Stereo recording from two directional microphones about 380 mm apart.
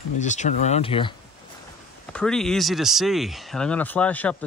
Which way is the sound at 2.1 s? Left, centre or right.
Centre.